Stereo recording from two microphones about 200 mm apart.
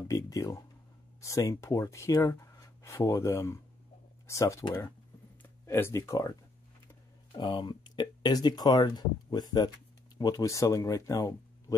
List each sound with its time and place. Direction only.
0.1 s a sound: 15° left (ahead or behind)
1.2 s speech: 15° left (ahead or behind)
7.3 s speech: 25° left (ahead or behind)